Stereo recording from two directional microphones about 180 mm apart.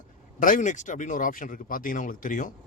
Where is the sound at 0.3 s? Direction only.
45° left (ahead or behind).